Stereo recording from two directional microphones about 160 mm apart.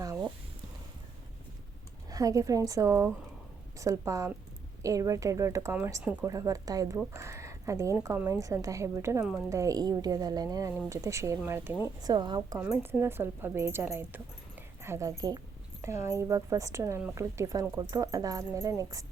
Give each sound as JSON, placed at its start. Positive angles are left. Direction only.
{"t": 2.0, "sound": "a woman's voice", "side_deg": -20}
{"t": 12.0, "sound": "speech", "side_deg": -25}
{"t": 12.5, "sound": "a woman's voice", "side_deg": -15}